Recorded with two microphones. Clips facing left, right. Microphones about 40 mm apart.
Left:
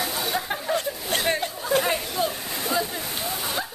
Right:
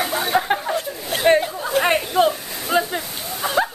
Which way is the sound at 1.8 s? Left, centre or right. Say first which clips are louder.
Right 8 dB; right.